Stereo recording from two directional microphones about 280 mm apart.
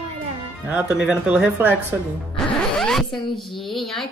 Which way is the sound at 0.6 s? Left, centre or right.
Centre.